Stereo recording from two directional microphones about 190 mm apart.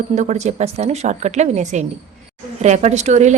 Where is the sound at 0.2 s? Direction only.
35° right (ahead or behind).